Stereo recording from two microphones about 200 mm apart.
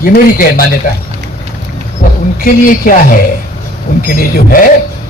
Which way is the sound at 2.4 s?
45° left (ahead or behind).